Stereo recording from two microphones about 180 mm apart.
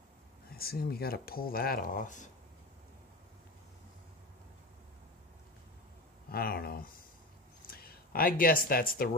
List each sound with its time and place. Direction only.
0.6 s speech: 55° left (ahead or behind)
6.3 s speech: 55° left (ahead or behind)